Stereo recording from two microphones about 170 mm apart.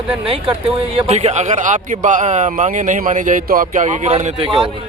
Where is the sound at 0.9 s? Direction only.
40° right (ahead or behind).